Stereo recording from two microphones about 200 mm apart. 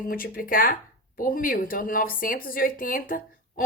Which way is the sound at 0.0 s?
45° left (ahead or behind).